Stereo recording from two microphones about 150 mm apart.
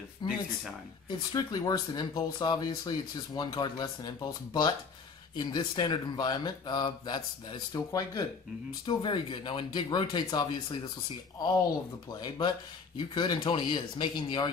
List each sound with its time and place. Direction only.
0.2 s speech: 30° left (ahead or behind)
8.8 s speech: 35° left (ahead or behind)
12.1 s speech: 30° left (ahead or behind)